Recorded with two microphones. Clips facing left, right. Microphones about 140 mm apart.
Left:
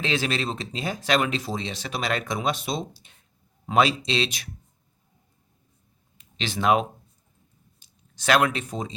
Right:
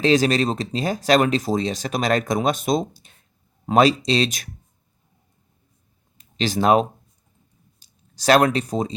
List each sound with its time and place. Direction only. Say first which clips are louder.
0.0 s speech: right 9 dB; 40° right (ahead or behind)
6.1 s speech: right 8 dB; 40° right (ahead or behind)